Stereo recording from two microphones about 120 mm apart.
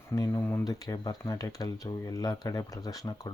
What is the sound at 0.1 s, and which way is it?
Speech, 25° left (ahead or behind).